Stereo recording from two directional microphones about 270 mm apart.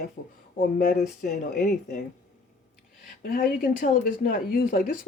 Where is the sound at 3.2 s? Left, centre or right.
Left.